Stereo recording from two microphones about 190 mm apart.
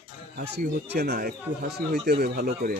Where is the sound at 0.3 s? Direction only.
55° right (ahead or behind).